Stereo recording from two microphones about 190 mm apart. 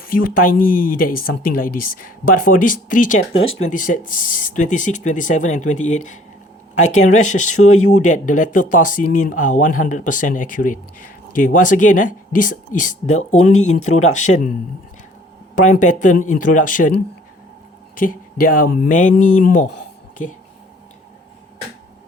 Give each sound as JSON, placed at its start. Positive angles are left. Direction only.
{"t": 0.0, "sound": "speech", "side_deg": 45}
{"t": 15.5, "sound": "speech", "side_deg": 40}
{"t": 17.9, "sound": "speech", "side_deg": 45}